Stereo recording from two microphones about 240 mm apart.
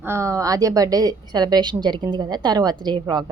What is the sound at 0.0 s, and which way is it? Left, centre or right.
A woman's voice, centre.